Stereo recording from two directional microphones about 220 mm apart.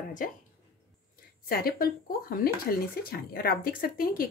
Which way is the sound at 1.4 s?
40° left (ahead or behind).